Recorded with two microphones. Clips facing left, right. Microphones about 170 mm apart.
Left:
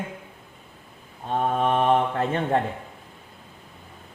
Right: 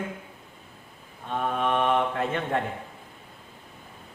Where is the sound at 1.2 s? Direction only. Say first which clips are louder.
Left 4 dB; 35° left (ahead or behind).